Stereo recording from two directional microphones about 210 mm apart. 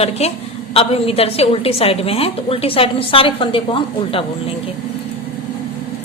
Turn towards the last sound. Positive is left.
turn(degrees=25)  # may be behind; listen again after turning